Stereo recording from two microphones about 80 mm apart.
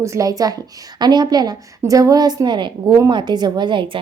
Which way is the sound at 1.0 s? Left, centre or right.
Right.